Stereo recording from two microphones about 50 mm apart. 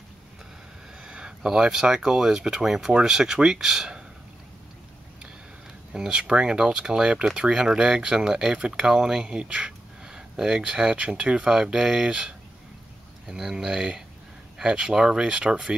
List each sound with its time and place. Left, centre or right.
1.0 s speech: centre
5.9 s speech: centre